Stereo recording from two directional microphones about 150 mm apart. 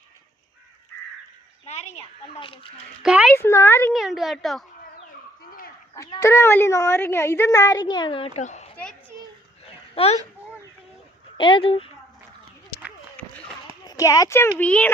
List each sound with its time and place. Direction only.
1.6 s speech: 50° left (ahead or behind)
3.0 s a woman's voice: 5° right (ahead or behind)
3.3 s speech: 15° left (ahead or behind)
3.9 s a woman's voice: centre (ahead or behind)
5.5 s a sound: 75° left (ahead or behind)
5.9 s speech: 20° left (ahead or behind)
8.4 s a child's voice: 50° left (ahead or behind)
9.9 s speech: 40° left (ahead or behind)
11.3 s speech: 35° left (ahead or behind)
13.2 s run: 10° left (ahead or behind)
13.8 s speech: 20° left (ahead or behind)